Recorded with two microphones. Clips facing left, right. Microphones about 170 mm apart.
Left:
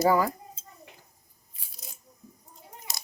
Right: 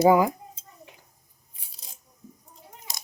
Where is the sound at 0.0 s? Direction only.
15° right (ahead or behind).